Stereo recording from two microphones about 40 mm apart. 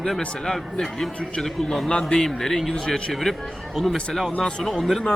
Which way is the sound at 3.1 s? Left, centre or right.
Centre.